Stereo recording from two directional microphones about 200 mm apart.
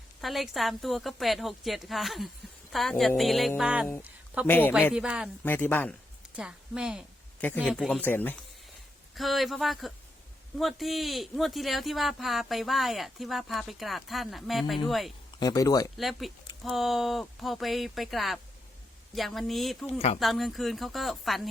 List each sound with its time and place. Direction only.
0.2 s speech: centre (ahead or behind)
4.4 s speech: 10° left (ahead or behind)
4.9 s speech: 5° right (ahead or behind)
5.4 s speech: 10° left (ahead or behind)
6.3 s a woman's voice: 5° right (ahead or behind)
15.4 s speech: 20° left (ahead or behind)
16.0 s speech: centre (ahead or behind)